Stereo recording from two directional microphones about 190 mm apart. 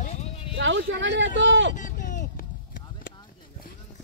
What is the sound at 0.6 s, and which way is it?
Vehicle, 75° right (ahead or behind).